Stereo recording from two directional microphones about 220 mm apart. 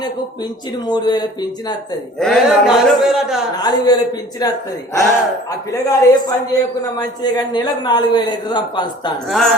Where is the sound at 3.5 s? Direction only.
20° left (ahead or behind).